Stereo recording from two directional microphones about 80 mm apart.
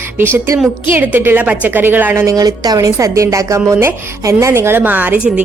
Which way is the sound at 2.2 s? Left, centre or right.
Right.